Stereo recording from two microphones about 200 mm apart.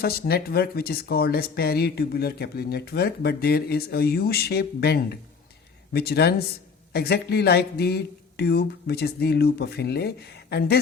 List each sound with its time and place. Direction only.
0.0 s speech: 50° left (ahead or behind)